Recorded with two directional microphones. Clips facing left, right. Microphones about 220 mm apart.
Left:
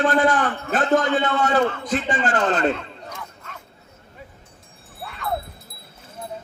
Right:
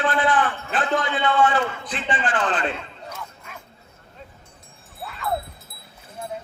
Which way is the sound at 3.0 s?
10° right (ahead or behind).